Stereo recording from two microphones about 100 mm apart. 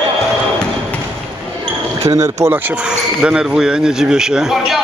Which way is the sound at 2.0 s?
30° right (ahead or behind).